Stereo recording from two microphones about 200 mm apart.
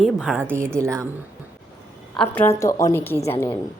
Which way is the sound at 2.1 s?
5° left (ahead or behind).